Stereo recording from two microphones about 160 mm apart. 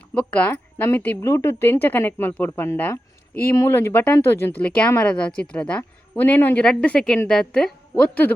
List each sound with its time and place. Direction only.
0.1 s speech: 10° left (ahead or behind)